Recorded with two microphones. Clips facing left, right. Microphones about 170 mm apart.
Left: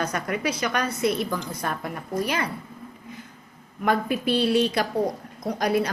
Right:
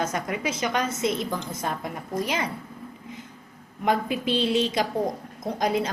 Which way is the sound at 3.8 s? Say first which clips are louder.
Left 1 dB; 20° right (ahead or behind).